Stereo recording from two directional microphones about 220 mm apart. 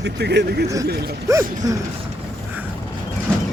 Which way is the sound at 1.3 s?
15° right (ahead or behind).